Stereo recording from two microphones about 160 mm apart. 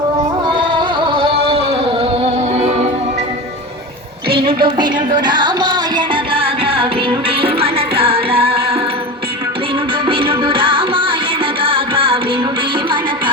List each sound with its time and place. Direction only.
0.4 s music: 30° right (ahead or behind)
4.4 s music: 30° right (ahead or behind)
10.1 s music: 35° right (ahead or behind)